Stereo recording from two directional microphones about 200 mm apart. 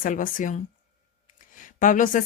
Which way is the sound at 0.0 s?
45° left (ahead or behind).